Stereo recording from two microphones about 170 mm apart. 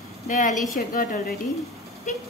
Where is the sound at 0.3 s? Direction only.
50° left (ahead or behind).